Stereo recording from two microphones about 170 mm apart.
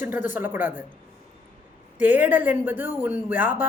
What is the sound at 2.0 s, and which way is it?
A woman's voice, 10° right (ahead or behind).